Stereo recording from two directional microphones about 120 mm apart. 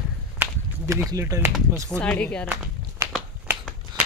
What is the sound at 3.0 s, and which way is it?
Finger snapping, 25° right (ahead or behind).